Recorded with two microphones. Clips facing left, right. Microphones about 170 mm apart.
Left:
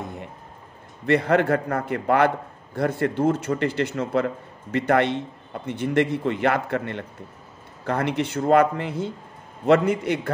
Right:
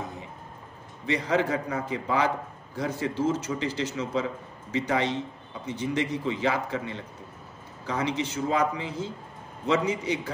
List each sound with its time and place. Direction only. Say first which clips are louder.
1.0 s a man's voice: left 6 dB; 60° left (ahead or behind)